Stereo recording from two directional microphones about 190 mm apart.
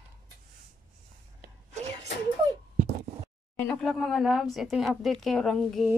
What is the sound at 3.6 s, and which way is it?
A woman's voice, 5° left (ahead or behind).